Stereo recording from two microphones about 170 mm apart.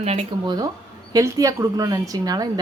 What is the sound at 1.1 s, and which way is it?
A woman's voice, 20° right (ahead or behind).